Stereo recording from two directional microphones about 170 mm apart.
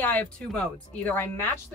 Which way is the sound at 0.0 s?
10° left (ahead or behind).